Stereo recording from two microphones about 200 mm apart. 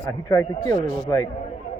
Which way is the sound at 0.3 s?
15° left (ahead or behind).